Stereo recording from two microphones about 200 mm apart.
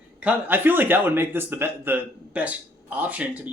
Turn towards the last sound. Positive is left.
turn(degrees=-5)  # may be behind; listen again after turning